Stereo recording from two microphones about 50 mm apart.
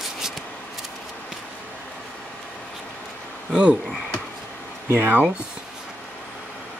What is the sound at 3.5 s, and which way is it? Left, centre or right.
Speech, centre.